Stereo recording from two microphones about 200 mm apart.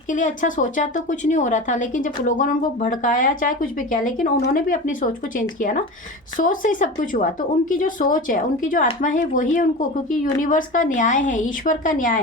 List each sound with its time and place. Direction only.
0.1 s a woman's voice: 40° left (ahead or behind)